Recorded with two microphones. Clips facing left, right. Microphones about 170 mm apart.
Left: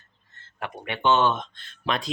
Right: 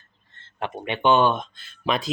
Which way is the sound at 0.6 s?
20° right (ahead or behind).